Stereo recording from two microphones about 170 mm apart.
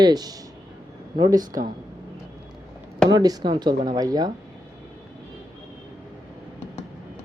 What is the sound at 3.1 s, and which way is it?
Speech, 25° right (ahead or behind).